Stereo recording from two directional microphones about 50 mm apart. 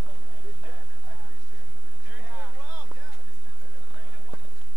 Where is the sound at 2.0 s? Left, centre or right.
Right.